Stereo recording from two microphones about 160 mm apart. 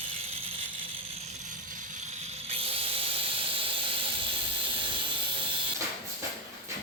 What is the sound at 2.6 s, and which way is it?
Hiss, 35° right (ahead or behind).